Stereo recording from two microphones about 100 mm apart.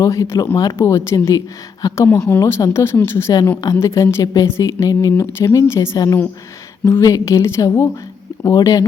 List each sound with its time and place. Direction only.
0.0 s a woman's voice: 30° left (ahead or behind)